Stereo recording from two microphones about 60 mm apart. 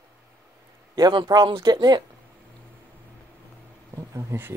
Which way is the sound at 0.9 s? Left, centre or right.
Right.